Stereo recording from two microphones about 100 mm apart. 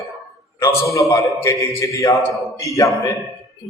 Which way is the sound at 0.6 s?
30° left (ahead or behind).